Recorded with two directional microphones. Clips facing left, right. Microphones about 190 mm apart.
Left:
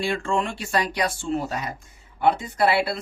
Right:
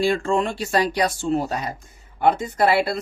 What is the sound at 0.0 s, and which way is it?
Speech, 40° right (ahead or behind).